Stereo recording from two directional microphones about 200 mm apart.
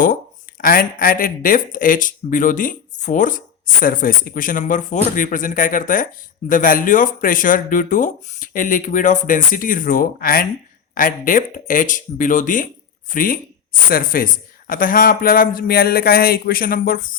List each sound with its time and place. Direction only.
0.6 s speech: 45° left (ahead or behind)